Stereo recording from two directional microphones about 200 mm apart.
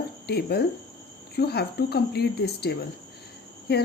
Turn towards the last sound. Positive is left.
turn(degrees=50)  # may be behind; listen again after turning